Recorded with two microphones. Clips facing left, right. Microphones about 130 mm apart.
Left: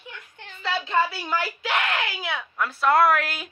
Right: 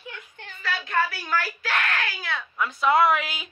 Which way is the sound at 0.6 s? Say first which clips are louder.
Left 2 dB; 25° left (ahead or behind).